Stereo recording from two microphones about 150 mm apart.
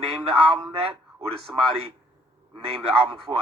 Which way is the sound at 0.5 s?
40° right (ahead or behind).